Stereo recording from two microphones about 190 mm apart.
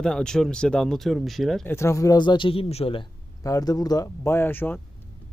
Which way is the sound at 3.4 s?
20° left (ahead or behind).